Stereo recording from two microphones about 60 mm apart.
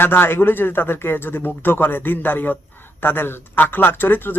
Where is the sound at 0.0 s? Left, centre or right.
Left.